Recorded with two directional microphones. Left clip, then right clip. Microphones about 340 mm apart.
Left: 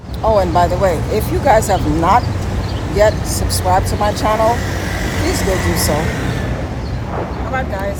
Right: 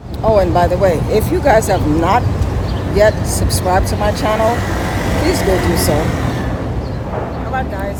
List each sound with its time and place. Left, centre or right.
0.3 s speech: centre
3.7 s speech: centre
5.4 s speech: right